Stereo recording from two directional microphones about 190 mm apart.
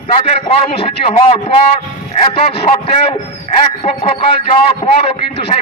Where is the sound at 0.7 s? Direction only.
30° left (ahead or behind).